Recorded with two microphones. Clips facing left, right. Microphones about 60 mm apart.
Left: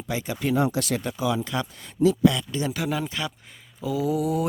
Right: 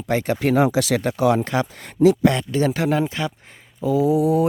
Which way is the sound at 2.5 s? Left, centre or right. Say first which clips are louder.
Right 8 dB; right.